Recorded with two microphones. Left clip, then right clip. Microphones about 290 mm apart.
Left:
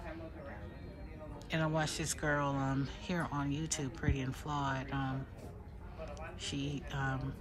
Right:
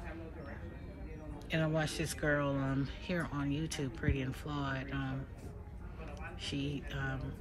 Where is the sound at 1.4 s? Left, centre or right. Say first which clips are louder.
Even; centre.